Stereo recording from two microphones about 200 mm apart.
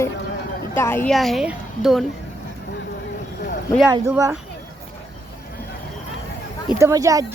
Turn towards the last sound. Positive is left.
turn(degrees=-15)  # may be behind; listen again after turning